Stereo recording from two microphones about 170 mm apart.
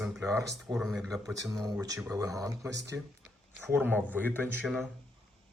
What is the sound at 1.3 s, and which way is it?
A man's voice, 20° right (ahead or behind).